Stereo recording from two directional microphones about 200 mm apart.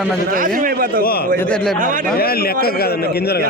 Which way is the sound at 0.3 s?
45° right (ahead or behind).